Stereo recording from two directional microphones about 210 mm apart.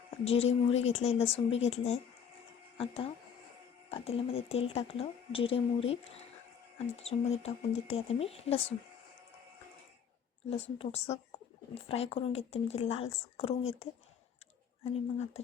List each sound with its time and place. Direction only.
0.3 s speech: 30° left (ahead or behind)
10.5 s speech: 30° left (ahead or behind)
14.8 s speech: 30° left (ahead or behind)